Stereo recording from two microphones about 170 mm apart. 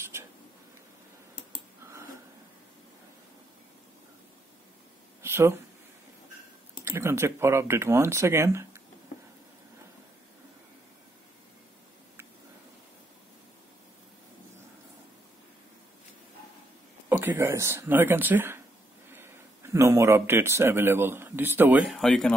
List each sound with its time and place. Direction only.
5.2 s a sound: 15° right (ahead or behind)
6.8 s speech: 15° right (ahead or behind)
17.1 s a man's voice: 15° right (ahead or behind)